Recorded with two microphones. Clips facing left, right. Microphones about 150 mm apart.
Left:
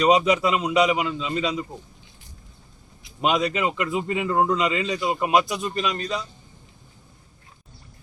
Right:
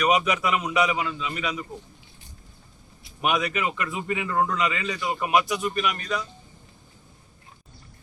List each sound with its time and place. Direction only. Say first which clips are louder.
0.0 s a man's voice: left 4 dB; 25° left (ahead or behind)
3.2 s a man's voice: left 3 dB; 25° left (ahead or behind)